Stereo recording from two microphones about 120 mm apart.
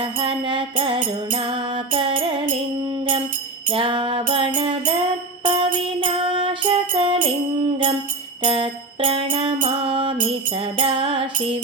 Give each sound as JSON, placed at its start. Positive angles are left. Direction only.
{"t": 0.0, "sound": "music", "side_deg": -50}
{"t": 3.7, "sound": "music", "side_deg": -50}
{"t": 8.4, "sound": "music", "side_deg": -50}